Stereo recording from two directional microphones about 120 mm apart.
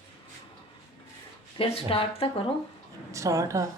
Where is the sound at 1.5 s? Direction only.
50° left (ahead or behind).